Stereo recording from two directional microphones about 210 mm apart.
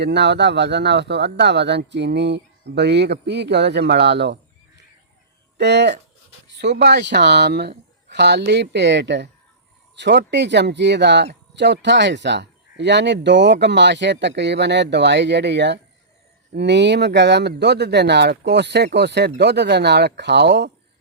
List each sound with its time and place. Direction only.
0.0 s speech: 55° right (ahead or behind)
5.5 s speech: 55° right (ahead or behind)